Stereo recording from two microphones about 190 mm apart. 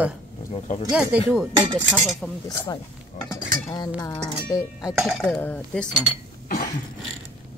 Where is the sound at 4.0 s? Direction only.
20° left (ahead or behind).